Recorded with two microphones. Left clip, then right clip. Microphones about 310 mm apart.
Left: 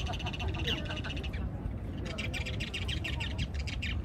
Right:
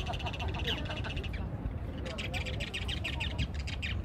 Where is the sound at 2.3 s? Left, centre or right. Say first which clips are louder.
Even; centre.